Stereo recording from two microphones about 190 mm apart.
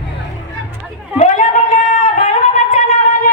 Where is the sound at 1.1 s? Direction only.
40° left (ahead or behind).